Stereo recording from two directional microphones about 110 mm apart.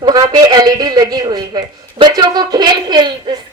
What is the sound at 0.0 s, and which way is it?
A man's voice, 35° right (ahead or behind).